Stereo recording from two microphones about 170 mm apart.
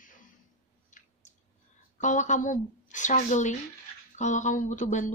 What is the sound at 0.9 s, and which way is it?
Chewing, 45° left (ahead or behind).